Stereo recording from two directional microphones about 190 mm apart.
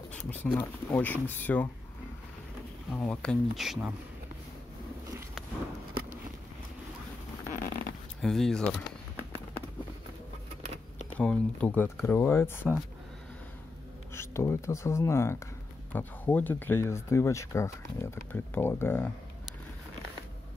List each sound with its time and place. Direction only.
0.1 s speech: 5° left (ahead or behind)
2.9 s speech: 5° left (ahead or behind)
7.5 s zipper: 45° left (ahead or behind)
8.2 s speech: centre (ahead or behind)
11.1 s speech: 5° left (ahead or behind)
14.1 s speech: 15° left (ahead or behind)